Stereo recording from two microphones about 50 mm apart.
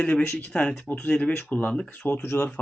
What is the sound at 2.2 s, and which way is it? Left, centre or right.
Speech, left.